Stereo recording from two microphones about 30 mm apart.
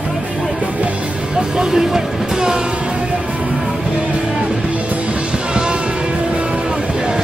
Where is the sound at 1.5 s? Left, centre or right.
Centre.